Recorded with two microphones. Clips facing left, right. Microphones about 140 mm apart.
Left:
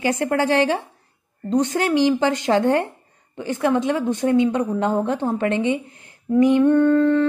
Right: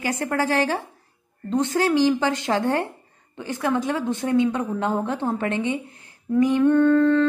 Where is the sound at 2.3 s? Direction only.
45° left (ahead or behind).